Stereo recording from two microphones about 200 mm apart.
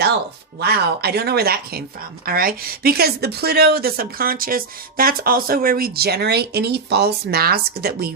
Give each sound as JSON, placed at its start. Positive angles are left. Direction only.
{"t": 0.6, "sound": "speech", "side_deg": -55}